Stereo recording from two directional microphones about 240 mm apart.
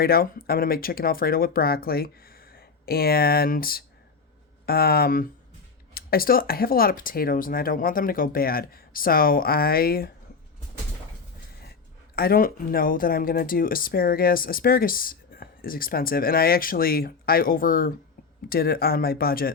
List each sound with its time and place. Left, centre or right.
0.0 s speech: left
12.1 s speech: left